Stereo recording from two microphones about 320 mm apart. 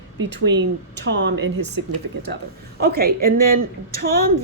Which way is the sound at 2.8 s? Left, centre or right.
Right.